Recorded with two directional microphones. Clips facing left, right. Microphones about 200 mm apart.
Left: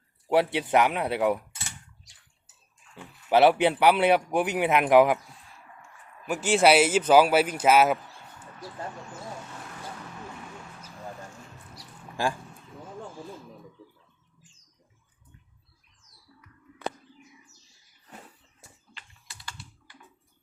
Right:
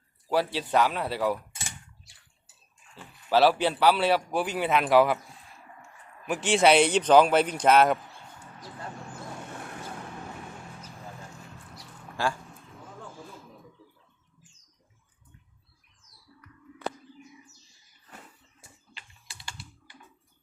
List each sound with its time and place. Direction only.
0.3 s a man's voice: 20° left (ahead or behind)
2.9 s a man's voice: 20° left (ahead or behind)
6.2 s speech: centre (ahead or behind)
12.1 s a sound: 15° left (ahead or behind)
18.9 s typing: 15° right (ahead or behind)